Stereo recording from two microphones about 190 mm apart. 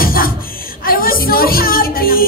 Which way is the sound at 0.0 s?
50° left (ahead or behind).